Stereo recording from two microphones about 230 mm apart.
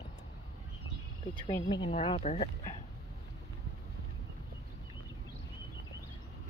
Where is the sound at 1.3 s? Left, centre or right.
Centre.